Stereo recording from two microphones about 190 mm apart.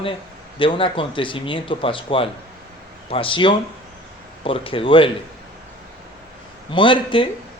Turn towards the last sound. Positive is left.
turn(degrees=25)  # may be behind; listen again after turning